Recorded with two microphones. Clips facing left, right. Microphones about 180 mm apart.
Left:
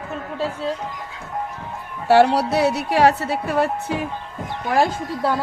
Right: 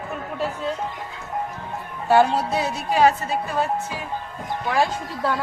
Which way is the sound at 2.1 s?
75° left (ahead or behind).